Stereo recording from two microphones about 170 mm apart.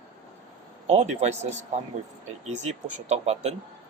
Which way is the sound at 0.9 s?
40° right (ahead or behind).